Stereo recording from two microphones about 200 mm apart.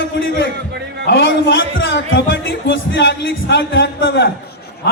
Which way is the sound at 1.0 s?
60° left (ahead or behind).